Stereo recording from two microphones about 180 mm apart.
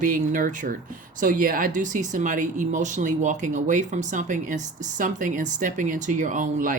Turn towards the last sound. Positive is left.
turn(degrees=-45)  # may be behind; listen again after turning